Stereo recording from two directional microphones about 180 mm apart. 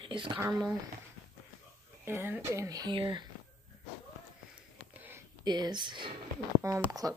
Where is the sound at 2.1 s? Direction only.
10° right (ahead or behind).